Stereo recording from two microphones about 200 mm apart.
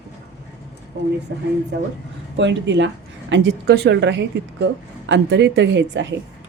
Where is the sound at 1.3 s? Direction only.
60° right (ahead or behind).